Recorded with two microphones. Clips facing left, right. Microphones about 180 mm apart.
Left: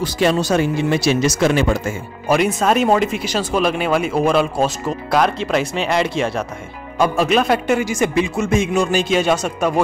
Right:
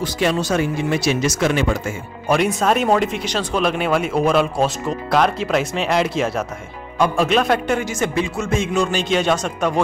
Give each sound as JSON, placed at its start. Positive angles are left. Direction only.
{"t": 0.0, "sound": "speech", "side_deg": 35}
{"t": 2.2, "sound": "speech", "side_deg": 0}